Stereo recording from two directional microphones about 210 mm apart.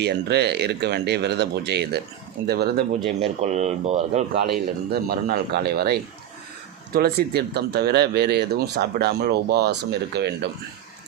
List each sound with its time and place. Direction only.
0.0 s speech: 50° right (ahead or behind)
3.2 s speech: 30° right (ahead or behind)
4.9 s speech: 45° right (ahead or behind)